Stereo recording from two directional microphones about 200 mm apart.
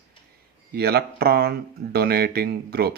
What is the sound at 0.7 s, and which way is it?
Speech, 50° right (ahead or behind).